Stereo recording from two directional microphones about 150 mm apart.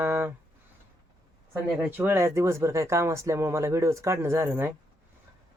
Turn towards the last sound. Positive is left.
turn(degrees=-15)  # may be behind; listen again after turning